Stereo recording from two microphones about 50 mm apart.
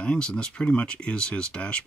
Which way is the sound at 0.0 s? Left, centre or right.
Left.